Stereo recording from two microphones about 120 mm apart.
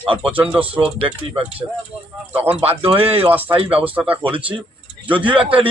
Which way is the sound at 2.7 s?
50° right (ahead or behind).